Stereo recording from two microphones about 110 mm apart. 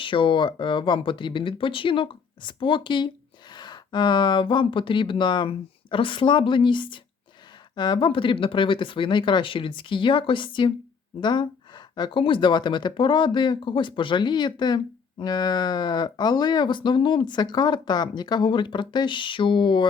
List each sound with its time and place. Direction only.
0.0 s speech: 50° left (ahead or behind)